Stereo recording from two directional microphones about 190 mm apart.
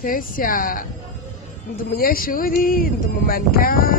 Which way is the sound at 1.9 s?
50° left (ahead or behind).